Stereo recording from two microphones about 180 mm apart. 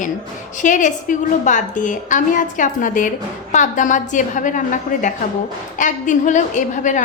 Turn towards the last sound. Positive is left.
turn(degrees=45)  # may be behind; listen again after turning